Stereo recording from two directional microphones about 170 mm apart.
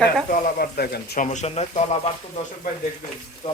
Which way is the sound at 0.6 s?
65° left (ahead or behind).